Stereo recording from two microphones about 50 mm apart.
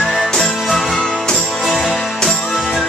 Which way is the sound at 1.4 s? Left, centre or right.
Centre.